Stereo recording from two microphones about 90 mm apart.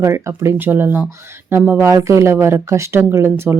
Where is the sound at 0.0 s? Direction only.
30° right (ahead or behind).